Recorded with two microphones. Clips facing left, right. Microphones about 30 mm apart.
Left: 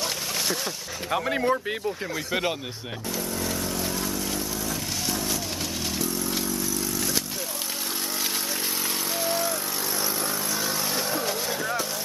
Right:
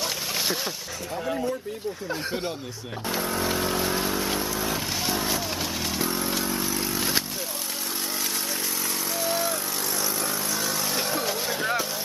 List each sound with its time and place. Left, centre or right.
1.3 s speech: left
3.1 s vehicle: right
6.0 s motorcycle: right
9.2 s vehicle: centre
11.0 s music: centre